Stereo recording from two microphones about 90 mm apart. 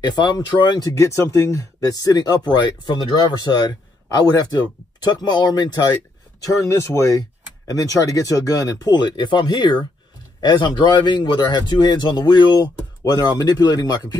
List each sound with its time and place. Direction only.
0.0 s speech: 55° left (ahead or behind); by 4.5 s 40° left (ahead or behind)
5.0 s speech: 50° left (ahead or behind)
6.4 s speech: 30° left (ahead or behind)